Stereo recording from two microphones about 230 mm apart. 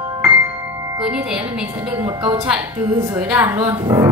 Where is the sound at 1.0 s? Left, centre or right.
Centre.